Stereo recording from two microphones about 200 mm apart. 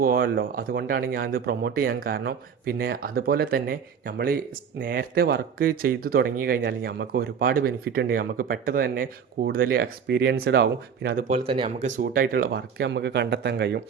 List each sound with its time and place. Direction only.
0.0 s speech: 45° right (ahead or behind)
11.4 s speech: 25° right (ahead or behind)
11.9 s speech: 45° right (ahead or behind); by 13.8 s 60° right (ahead or behind)